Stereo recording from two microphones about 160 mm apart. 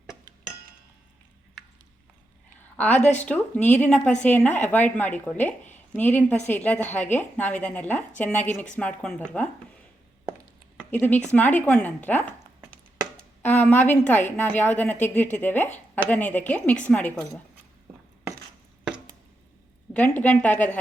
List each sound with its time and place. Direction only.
2.7 s speech: 10° left (ahead or behind)
3.0 s speech: 45° left (ahead or behind)
3.2 s speech: 10° left (ahead or behind)
10.9 s speech: 10° left (ahead or behind)
13.4 s speech: 10° left (ahead or behind)
19.9 s speech: 10° left (ahead or behind)